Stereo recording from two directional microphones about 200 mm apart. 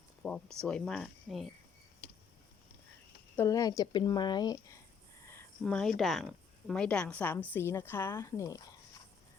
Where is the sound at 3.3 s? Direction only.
15° left (ahead or behind).